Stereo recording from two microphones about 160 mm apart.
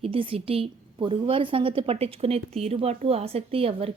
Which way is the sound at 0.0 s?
35° right (ahead or behind).